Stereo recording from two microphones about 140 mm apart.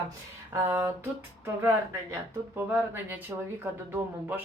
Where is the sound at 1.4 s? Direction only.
15° right (ahead or behind).